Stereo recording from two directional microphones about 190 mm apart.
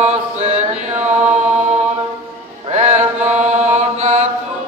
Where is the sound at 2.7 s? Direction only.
35° right (ahead or behind).